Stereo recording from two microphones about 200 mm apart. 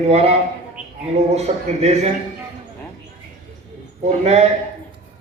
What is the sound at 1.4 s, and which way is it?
Speech, 30° right (ahead or behind).